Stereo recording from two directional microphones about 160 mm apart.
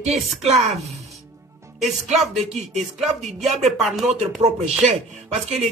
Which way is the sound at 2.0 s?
45° right (ahead or behind).